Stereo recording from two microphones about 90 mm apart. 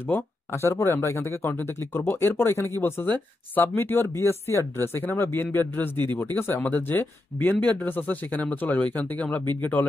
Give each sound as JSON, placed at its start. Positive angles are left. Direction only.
{"t": 0.0, "sound": "speech", "side_deg": 25}